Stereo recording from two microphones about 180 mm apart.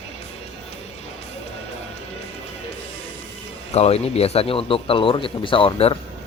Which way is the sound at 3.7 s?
35° left (ahead or behind).